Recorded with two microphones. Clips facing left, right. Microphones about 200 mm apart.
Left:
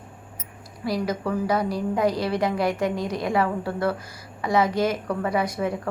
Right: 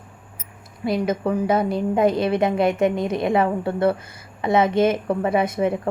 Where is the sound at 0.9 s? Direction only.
25° right (ahead or behind).